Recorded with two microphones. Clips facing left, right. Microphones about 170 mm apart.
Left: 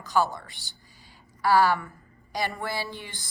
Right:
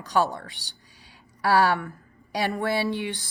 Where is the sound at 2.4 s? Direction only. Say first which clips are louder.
Right 5 dB; 65° right (ahead or behind).